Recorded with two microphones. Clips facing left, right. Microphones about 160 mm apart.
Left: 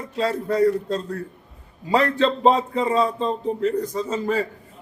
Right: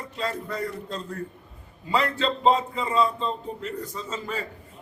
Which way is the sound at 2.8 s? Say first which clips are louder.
Left 4 dB; 40° left (ahead or behind).